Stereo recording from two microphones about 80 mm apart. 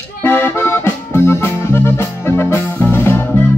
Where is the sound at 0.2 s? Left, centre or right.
Left.